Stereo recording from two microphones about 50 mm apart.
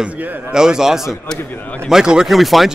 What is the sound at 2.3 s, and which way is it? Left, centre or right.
Speech, centre.